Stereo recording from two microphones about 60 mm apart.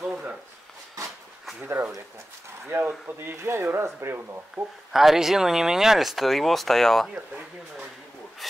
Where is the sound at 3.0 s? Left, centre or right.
Right.